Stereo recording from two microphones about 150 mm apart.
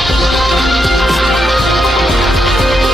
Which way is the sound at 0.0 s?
Centre (ahead or behind).